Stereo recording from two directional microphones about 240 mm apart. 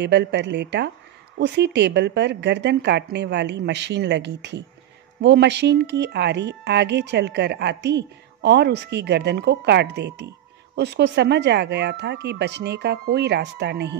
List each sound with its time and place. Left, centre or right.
0.0 s speech: right